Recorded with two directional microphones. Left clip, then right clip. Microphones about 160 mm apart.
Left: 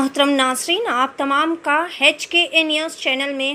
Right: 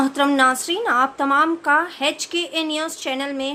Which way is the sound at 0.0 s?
5° left (ahead or behind).